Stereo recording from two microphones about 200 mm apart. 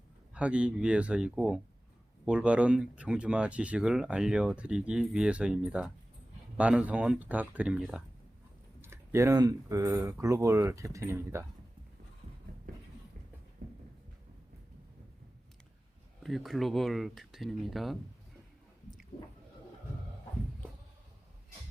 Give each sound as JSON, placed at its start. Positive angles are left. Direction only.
{"t": 0.3, "sound": "speech", "side_deg": -5}
{"t": 13.6, "sound": "a sound", "side_deg": -50}
{"t": 16.2, "sound": "speech", "side_deg": 0}